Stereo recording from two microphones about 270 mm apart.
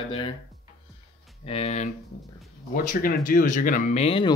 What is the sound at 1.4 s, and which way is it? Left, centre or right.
Speech, left.